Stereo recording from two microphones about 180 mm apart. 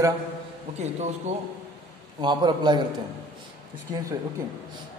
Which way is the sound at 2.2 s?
25° right (ahead or behind).